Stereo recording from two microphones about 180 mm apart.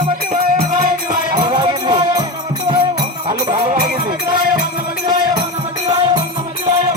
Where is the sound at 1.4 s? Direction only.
20° right (ahead or behind).